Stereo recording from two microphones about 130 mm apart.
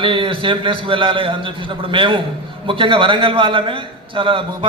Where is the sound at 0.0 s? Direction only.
40° right (ahead or behind).